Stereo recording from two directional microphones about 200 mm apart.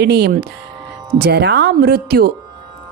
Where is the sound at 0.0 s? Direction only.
55° right (ahead or behind).